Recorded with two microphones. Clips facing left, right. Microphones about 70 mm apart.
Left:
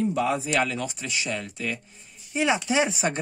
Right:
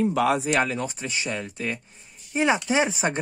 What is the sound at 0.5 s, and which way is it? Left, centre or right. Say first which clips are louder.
Speech: right 1 dB; right.